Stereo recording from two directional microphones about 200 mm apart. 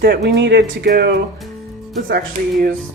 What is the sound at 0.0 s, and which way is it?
Speech, 55° right (ahead or behind).